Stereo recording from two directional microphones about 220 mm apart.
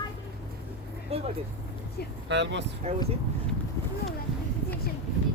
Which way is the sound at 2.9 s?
30° right (ahead or behind).